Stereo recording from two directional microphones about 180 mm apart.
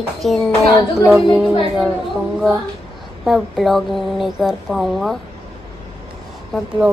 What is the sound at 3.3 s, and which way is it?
Speech, centre (ahead or behind).